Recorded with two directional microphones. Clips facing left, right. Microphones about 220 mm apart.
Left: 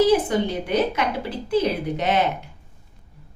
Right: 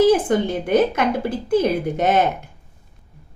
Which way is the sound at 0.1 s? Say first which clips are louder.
Right 2 dB; 50° right (ahead or behind).